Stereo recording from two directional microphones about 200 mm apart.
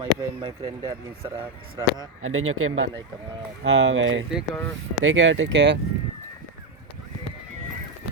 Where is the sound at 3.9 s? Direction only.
70° right (ahead or behind).